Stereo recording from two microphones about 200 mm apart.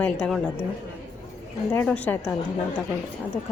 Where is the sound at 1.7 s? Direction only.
10° left (ahead or behind).